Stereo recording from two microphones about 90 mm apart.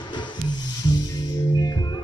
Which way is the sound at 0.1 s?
55° left (ahead or behind).